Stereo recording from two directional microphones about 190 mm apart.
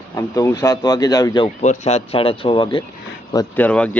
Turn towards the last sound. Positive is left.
turn(degrees=10)  # may be behind; listen again after turning